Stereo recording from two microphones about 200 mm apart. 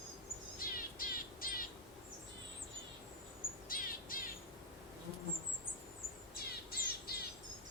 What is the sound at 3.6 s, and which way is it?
Bird, 45° left (ahead or behind).